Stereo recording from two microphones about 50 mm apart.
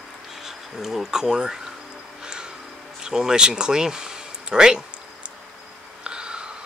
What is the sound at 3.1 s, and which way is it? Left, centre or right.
Speech, centre.